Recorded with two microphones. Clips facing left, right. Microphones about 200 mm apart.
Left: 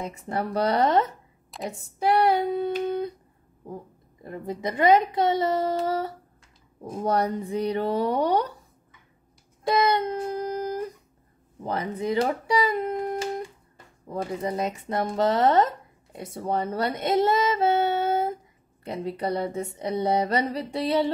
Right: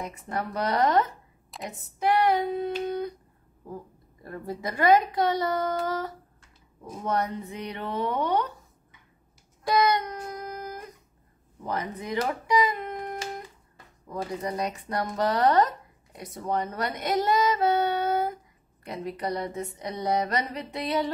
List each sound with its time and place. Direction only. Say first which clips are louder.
0.0 s a woman's voice: left 3 dB; 25° left (ahead or behind)
9.7 s a woman's voice: left 1 dB; 25° left (ahead or behind)